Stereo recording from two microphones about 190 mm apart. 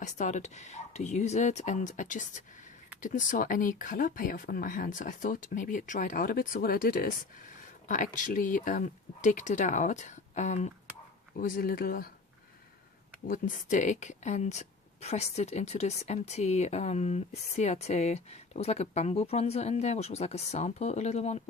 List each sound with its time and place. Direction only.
0.0 s speech: 40° left (ahead or behind)
11.3 s speech: 50° left (ahead or behind)
13.2 s speech: 45° left (ahead or behind)